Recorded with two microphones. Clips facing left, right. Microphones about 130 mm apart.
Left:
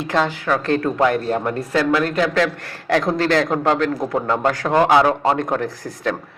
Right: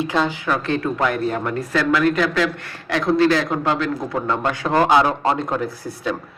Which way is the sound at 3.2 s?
55° left (ahead or behind).